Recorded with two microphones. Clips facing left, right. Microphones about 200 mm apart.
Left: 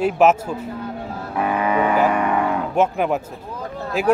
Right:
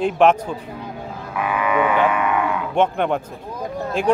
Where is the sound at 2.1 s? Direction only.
40° left (ahead or behind).